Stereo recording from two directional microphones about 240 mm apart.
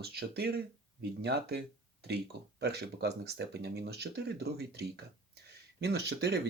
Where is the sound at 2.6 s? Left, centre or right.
Right.